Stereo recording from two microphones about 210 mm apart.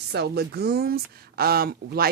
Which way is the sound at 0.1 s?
50° right (ahead or behind).